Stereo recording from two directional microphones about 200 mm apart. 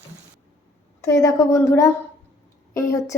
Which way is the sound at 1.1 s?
15° left (ahead or behind).